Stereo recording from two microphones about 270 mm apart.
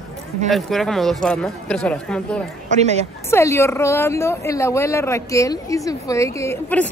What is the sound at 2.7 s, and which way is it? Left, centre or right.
Speech, right.